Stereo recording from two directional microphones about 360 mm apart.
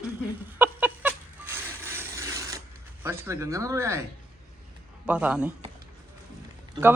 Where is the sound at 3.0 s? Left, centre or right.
Centre.